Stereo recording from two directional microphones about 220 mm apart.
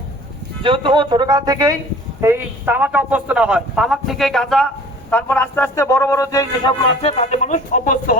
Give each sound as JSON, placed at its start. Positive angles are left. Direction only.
{"t": 0.6, "sound": "a man's voice", "side_deg": -25}